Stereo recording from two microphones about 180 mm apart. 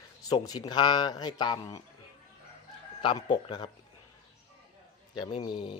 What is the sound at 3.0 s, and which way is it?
Speech, 25° left (ahead or behind).